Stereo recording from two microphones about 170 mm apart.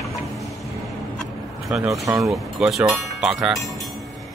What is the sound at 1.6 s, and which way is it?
Speech, centre (ahead or behind).